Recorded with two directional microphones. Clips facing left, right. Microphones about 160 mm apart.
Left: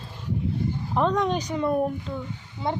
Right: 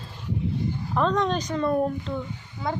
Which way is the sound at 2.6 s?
25° left (ahead or behind).